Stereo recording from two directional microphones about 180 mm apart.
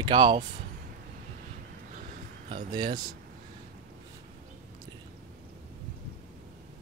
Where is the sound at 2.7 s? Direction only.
25° right (ahead or behind).